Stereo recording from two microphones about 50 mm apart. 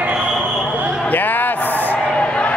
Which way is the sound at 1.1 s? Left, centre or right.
Left.